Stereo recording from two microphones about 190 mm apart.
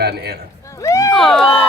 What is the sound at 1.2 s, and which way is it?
Speech, centre (ahead or behind).